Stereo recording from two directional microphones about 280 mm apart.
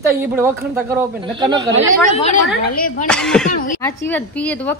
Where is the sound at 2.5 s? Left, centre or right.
Left.